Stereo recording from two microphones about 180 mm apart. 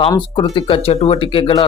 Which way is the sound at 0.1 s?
20° left (ahead or behind).